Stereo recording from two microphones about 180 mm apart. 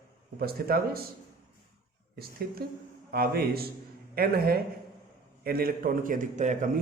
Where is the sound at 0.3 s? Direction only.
55° right (ahead or behind).